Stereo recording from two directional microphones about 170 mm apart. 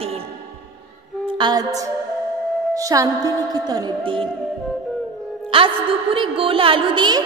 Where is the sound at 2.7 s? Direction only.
20° right (ahead or behind).